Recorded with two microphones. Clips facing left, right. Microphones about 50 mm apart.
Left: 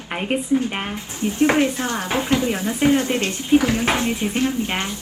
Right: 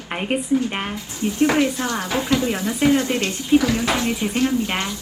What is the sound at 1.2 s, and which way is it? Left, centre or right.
Speech, left.